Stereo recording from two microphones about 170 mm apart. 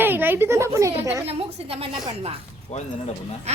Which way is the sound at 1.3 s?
35° right (ahead or behind).